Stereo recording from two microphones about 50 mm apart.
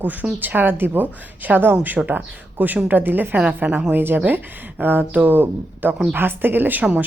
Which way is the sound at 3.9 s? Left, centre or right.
Right.